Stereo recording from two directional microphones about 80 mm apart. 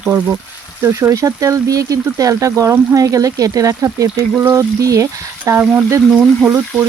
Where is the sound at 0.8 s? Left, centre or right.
Right.